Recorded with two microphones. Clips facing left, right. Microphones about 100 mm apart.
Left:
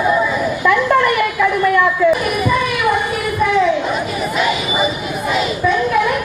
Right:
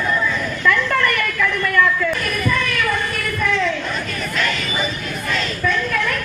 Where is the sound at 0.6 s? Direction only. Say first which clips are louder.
Left 5 dB; 20° left (ahead or behind).